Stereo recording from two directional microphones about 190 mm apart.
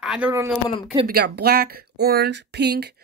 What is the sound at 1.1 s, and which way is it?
Speech, 55° right (ahead or behind).